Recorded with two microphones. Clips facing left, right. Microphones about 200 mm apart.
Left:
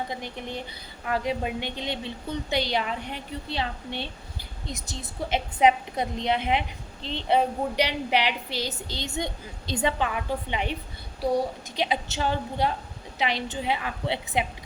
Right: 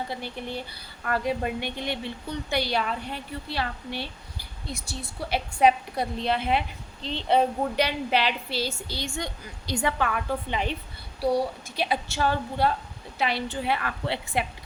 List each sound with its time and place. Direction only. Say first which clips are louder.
0.1 s a woman's voice: right 1 dB; 20° left (ahead or behind)
11.8 s a woman's voice: right 1 dB; 20° left (ahead or behind)